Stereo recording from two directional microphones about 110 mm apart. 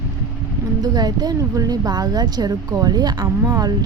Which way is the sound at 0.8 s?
35° right (ahead or behind).